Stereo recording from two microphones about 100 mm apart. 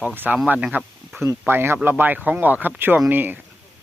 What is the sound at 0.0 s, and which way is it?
Speech, 15° right (ahead or behind).